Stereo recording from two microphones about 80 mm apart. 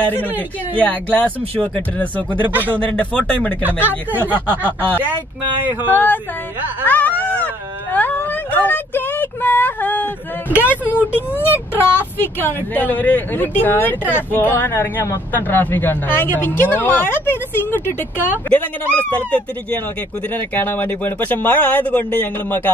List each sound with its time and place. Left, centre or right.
0.0 s speech: left
3.8 s speech: right
4.5 s speech: centre
5.7 s speech: right
6.9 s a sound: left
10.5 s speech: centre
11.8 s speech: left